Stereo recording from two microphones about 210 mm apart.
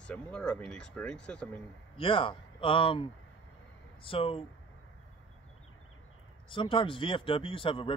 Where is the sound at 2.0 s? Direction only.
25° left (ahead or behind).